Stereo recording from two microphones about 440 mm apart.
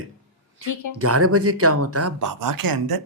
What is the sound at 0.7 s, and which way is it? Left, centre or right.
Speech, left.